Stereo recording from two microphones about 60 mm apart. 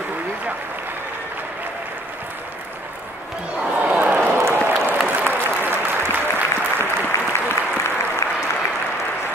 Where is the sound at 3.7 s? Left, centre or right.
Right.